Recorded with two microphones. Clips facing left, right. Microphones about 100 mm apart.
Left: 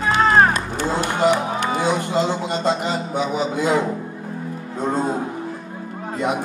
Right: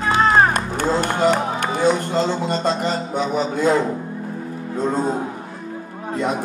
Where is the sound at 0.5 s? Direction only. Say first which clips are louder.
Right 2 dB; 50° right (ahead or behind).